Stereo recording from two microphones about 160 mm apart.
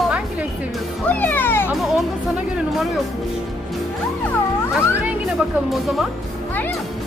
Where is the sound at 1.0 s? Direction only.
10° left (ahead or behind).